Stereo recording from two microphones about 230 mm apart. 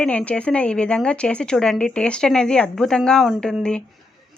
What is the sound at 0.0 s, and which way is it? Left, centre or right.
A woman's voice, centre.